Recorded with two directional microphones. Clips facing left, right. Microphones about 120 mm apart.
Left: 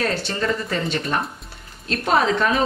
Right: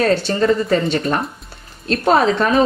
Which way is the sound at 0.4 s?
35° right (ahead or behind).